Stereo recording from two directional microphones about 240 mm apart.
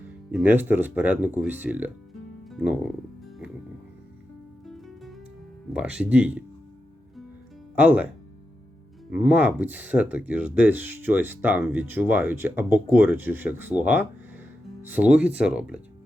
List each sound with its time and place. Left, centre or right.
0.3 s speech: centre
2.5 s music: centre
4.6 s music: centre
5.7 s speech: centre
7.8 s speech: centre